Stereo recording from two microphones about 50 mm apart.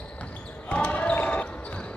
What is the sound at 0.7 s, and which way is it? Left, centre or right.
Basketball bounce, left.